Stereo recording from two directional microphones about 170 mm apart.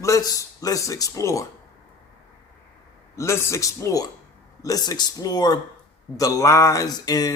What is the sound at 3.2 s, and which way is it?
A man's voice, 15° left (ahead or behind).